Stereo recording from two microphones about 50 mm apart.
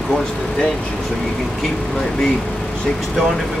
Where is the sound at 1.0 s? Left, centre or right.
Centre.